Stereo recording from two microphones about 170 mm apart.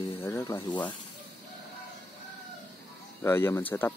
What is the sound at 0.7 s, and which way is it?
Speech, 25° left (ahead or behind).